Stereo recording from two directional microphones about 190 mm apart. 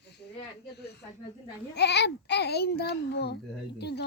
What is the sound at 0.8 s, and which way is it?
A child's voice, 60° left (ahead or behind).